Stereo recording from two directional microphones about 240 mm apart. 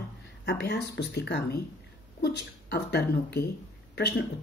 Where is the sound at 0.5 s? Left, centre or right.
Left.